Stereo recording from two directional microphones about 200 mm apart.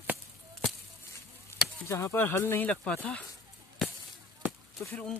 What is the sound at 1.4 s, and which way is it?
Speech, 15° left (ahead or behind).